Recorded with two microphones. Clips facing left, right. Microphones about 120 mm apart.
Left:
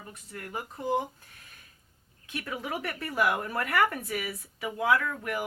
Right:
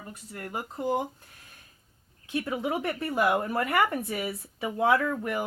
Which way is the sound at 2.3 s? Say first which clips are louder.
Right 6 dB; 25° right (ahead or behind).